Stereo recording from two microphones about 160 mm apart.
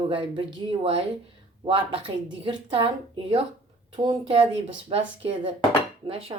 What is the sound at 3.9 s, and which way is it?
Speech, 30° right (ahead or behind).